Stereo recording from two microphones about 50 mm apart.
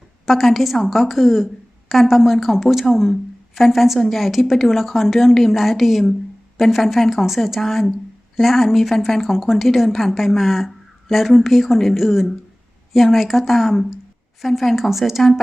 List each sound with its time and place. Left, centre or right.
0.3 s a woman's voice: centre